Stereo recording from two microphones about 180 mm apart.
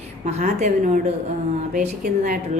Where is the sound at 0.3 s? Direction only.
40° right (ahead or behind).